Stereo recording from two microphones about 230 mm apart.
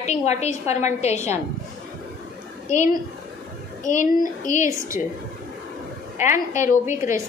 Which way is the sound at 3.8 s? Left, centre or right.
Left.